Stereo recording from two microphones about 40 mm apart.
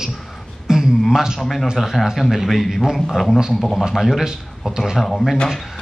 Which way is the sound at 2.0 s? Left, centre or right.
Centre.